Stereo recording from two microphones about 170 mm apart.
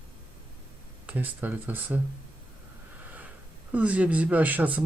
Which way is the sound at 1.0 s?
10° right (ahead or behind).